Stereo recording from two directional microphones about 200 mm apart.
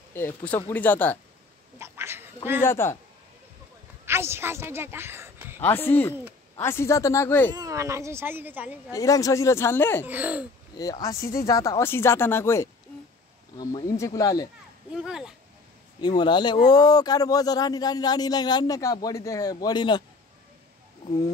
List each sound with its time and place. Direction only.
0.1 s speech: 10° left (ahead or behind)
1.8 s duck: 10° right (ahead or behind)
2.6 s speech: 10° left (ahead or behind)
4.0 s a woman's voice: 10° right (ahead or behind)
5.6 s speech: 10° left (ahead or behind)
7.5 s speech: 15° right (ahead or behind)
8.9 s speech: 15° left (ahead or behind)
10.0 s speech: 10° right (ahead or behind)
10.7 s speech: 20° left (ahead or behind)
15.0 s speech: 5° right (ahead or behind)
16.0 s speech: 20° left (ahead or behind)